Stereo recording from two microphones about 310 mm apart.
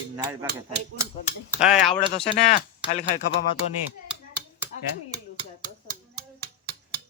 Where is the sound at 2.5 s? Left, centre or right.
Left.